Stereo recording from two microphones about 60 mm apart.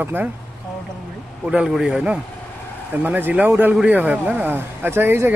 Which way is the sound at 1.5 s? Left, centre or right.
Centre.